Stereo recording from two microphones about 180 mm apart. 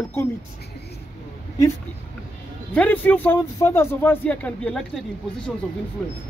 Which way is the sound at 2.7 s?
10° left (ahead or behind).